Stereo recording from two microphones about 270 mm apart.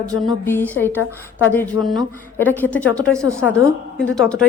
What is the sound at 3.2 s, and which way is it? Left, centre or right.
Speech, centre.